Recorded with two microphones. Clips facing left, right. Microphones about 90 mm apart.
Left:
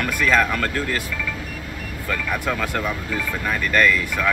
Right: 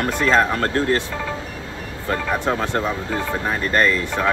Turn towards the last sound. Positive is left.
turn(degrees=-30)  # may be behind; listen again after turning